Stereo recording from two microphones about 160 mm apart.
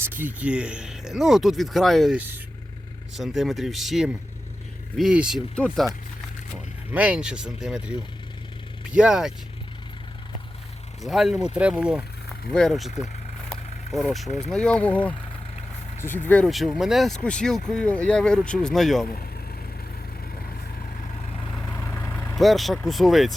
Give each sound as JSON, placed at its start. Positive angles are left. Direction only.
{"t": 0.0, "sound": "speech", "side_deg": -10}
{"t": 6.9, "sound": "speech", "side_deg": -10}
{"t": 11.0, "sound": "speech", "side_deg": 0}
{"t": 13.5, "sound": "vehicle", "side_deg": 0}
{"t": 14.5, "sound": "speech", "side_deg": 5}
{"t": 21.5, "sound": "vehicle", "side_deg": 10}
{"t": 22.4, "sound": "speech", "side_deg": 0}